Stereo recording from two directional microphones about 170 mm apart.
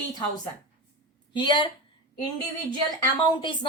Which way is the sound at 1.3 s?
25° left (ahead or behind).